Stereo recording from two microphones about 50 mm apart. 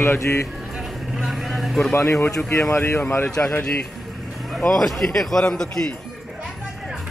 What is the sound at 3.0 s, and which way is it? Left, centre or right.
Speech, left.